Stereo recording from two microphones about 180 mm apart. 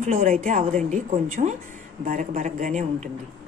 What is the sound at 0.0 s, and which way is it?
A woman's voice, 45° right (ahead or behind).